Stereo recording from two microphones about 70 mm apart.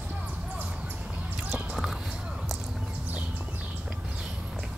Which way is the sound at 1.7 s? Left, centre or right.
Centre.